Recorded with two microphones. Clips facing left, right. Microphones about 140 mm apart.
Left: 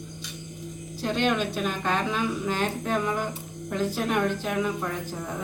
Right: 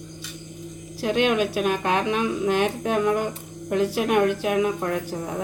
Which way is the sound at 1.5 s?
65° right (ahead or behind).